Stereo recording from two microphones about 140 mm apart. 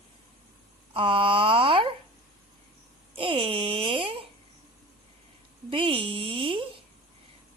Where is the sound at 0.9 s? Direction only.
40° right (ahead or behind).